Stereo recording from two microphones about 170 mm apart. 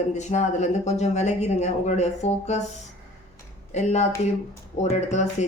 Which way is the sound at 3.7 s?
40° left (ahead or behind).